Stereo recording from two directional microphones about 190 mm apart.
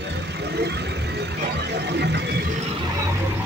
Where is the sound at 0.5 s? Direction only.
60° right (ahead or behind).